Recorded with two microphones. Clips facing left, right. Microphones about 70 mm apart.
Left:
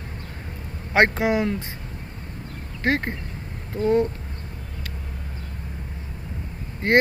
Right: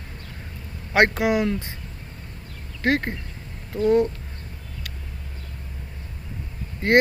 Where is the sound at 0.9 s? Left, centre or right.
Left.